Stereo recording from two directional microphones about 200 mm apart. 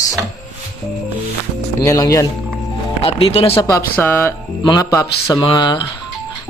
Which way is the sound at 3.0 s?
30° left (ahead or behind).